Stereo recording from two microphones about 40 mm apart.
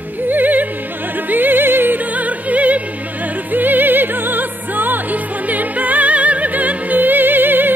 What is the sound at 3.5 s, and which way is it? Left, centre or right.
Music, right.